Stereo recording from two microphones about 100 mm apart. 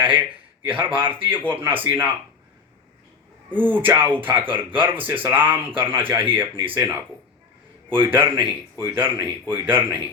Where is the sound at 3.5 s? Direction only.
20° right (ahead or behind).